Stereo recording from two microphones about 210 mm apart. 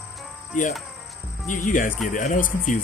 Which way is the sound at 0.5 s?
35° left (ahead or behind).